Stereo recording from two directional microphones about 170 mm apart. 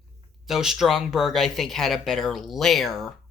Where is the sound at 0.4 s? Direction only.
Centre (ahead or behind).